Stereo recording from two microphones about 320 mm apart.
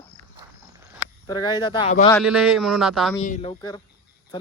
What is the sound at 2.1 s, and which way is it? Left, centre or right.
Speech, centre.